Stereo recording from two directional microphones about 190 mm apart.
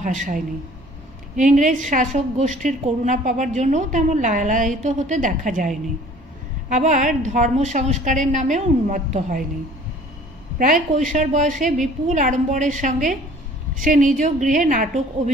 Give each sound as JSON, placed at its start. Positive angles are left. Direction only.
{"t": 0.0, "sound": "a woman's voice", "side_deg": -40}
{"t": 10.6, "sound": "a woman's voice", "side_deg": -45}